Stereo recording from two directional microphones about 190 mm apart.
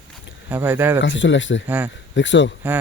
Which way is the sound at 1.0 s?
75° left (ahead or behind).